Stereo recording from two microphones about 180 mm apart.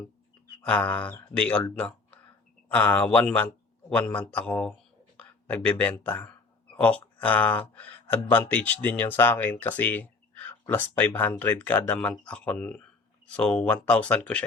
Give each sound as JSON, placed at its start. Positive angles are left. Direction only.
{"t": 0.6, "sound": "speech", "side_deg": 5}
{"t": 2.7, "sound": "speech", "side_deg": 10}